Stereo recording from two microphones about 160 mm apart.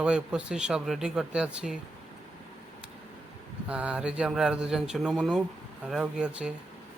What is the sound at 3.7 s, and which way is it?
Speech, 5° right (ahead or behind).